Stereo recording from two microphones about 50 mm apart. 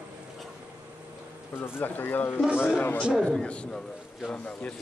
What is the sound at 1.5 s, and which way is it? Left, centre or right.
Speech, left.